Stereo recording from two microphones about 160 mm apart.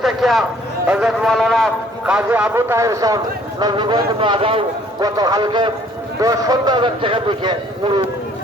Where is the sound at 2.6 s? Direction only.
15° right (ahead or behind); by 7.5 s 30° right (ahead or behind).